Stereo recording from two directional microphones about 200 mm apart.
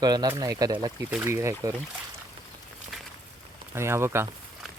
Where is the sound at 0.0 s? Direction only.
20° right (ahead or behind).